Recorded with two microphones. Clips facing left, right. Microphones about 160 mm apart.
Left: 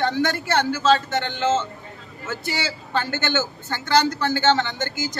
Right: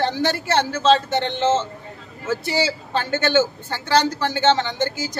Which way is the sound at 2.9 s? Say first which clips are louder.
Right 3 dB; 30° right (ahead or behind).